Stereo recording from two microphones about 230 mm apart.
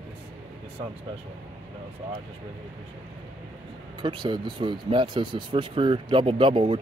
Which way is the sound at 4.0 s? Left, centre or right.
Right.